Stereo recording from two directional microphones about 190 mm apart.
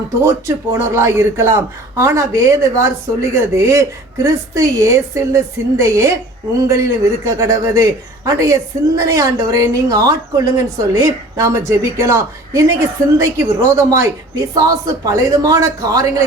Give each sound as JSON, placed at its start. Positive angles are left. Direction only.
{"t": 0.2, "sound": "speech", "side_deg": -15}